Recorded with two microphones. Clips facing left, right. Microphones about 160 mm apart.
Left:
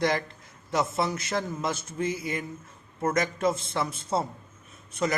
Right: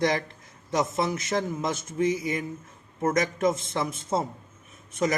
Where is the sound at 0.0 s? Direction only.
20° right (ahead or behind).